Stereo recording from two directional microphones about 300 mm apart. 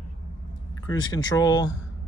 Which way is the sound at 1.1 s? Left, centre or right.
Centre.